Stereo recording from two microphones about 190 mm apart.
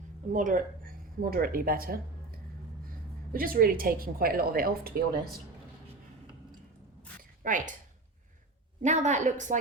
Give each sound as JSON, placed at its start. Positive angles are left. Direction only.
{"t": 0.3, "sound": "speech", "side_deg": -45}
{"t": 3.3, "sound": "a woman's voice", "side_deg": -50}
{"t": 7.2, "sound": "a sound", "side_deg": -45}
{"t": 8.8, "sound": "a woman's voice", "side_deg": -40}